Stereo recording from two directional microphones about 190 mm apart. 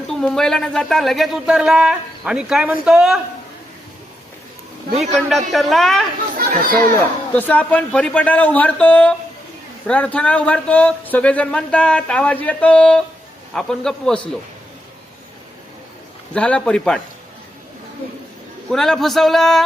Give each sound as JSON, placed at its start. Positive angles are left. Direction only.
{"t": 0.1, "sound": "speech", "side_deg": 0}
{"t": 5.5, "sound": "speech", "side_deg": 0}
{"t": 6.3, "sound": "chatter", "side_deg": -45}
{"t": 6.7, "sound": "speech", "side_deg": 10}
{"t": 16.3, "sound": "speech", "side_deg": 5}
{"t": 18.7, "sound": "speech", "side_deg": 0}